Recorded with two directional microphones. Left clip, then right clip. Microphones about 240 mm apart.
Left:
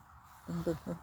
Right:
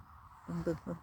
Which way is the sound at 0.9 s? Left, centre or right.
Centre.